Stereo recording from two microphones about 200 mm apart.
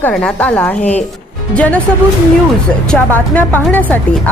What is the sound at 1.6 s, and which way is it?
Speech, 5° left (ahead or behind).